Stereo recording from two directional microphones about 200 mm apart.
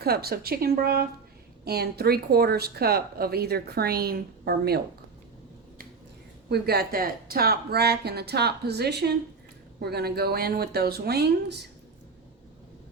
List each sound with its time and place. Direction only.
0.0 s speech: 50° right (ahead or behind)
6.5 s speech: 50° right (ahead or behind)